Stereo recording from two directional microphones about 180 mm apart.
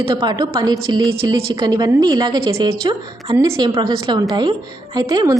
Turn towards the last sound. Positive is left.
turn(degrees=-20)  # may be behind; listen again after turning